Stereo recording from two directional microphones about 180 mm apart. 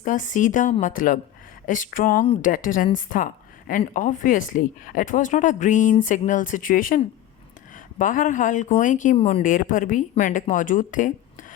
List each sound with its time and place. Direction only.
0.0 s a woman's voice: 45° left (ahead or behind)
9.1 s speech: 35° left (ahead or behind)
9.4 s a woman's voice: 50° left (ahead or behind)